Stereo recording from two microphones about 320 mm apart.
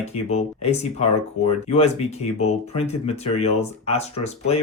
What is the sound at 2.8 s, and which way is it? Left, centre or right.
Speech, centre.